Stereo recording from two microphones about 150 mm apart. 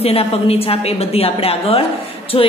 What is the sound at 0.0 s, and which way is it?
A woman's voice, 40° left (ahead or behind).